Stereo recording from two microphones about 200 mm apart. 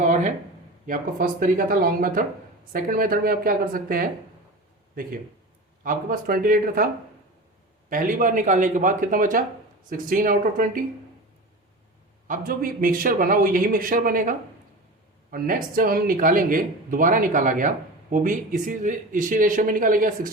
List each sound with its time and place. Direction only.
0.0 s a sound: 35° right (ahead or behind)
0.9 s speech: 45° right (ahead or behind)
5.8 s speech: 45° right (ahead or behind)
7.9 s speech: 45° right (ahead or behind)
12.3 s speech: 45° right (ahead or behind)